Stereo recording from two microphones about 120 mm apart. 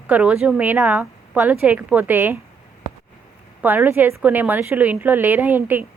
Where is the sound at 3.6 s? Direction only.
15° right (ahead or behind).